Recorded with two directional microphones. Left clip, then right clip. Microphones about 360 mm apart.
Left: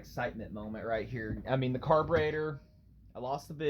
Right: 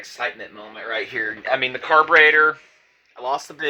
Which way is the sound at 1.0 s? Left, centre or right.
Right.